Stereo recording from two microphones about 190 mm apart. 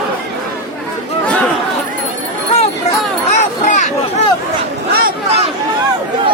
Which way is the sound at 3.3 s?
40° left (ahead or behind).